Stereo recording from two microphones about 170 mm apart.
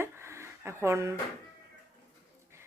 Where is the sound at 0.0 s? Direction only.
15° right (ahead or behind).